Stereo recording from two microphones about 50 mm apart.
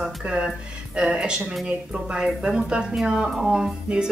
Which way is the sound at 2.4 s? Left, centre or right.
Centre.